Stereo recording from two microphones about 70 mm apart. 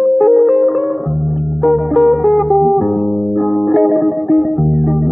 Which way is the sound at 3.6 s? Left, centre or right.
Centre.